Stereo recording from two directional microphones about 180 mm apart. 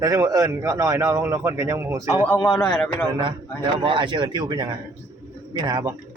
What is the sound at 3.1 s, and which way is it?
Speech, 25° right (ahead or behind).